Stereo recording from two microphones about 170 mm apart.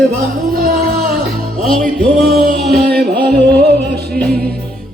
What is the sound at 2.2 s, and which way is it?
Music, 65° right (ahead or behind).